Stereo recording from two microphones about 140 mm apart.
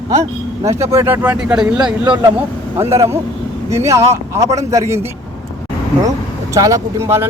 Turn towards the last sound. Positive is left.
turn(degrees=-25)  # may be behind; listen again after turning